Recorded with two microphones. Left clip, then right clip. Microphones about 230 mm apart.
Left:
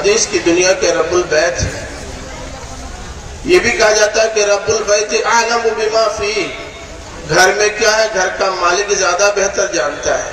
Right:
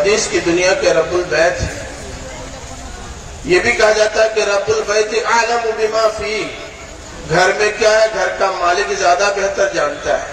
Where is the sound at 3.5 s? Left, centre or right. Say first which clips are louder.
Left 1 dB; left.